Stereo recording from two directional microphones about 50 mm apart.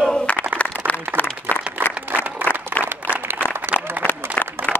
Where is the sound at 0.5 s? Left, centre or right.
Left.